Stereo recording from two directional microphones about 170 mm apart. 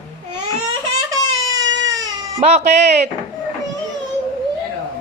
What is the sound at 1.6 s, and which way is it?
Baby cry, 90° right.